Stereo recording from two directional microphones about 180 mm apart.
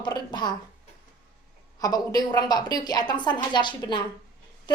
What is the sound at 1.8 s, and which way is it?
Speech, 20° left (ahead or behind).